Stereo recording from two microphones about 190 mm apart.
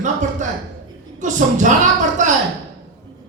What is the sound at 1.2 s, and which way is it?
Speech, 40° right (ahead or behind).